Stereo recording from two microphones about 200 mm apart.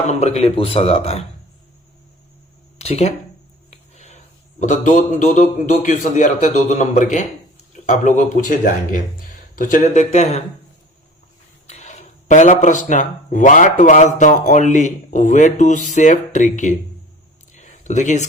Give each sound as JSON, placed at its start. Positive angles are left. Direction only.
{"t": 0.1, "sound": "speech", "side_deg": 35}
{"t": 2.7, "sound": "speech", "side_deg": 30}
{"t": 3.7, "sound": "a sound", "side_deg": 35}
{"t": 4.6, "sound": "speech", "side_deg": 40}
{"t": 11.7, "sound": "speech", "side_deg": 35}
{"t": 17.5, "sound": "a sound", "side_deg": 35}